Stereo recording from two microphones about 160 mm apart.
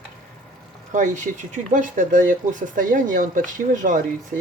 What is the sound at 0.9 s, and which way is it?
Speech, 50° right (ahead or behind).